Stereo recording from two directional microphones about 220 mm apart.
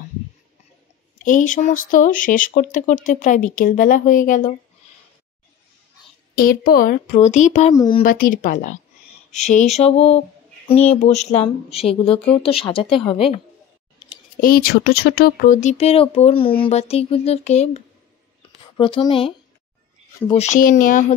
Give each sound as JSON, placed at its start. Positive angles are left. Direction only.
{"t": 1.1, "sound": "speech", "side_deg": 35}
{"t": 6.3, "sound": "speech", "side_deg": 40}
{"t": 7.7, "sound": "speech", "side_deg": 15}
{"t": 8.0, "sound": "speech", "side_deg": 40}
{"t": 14.4, "sound": "speech", "side_deg": 40}